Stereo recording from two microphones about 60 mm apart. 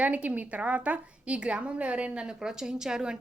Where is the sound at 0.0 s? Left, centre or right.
Right.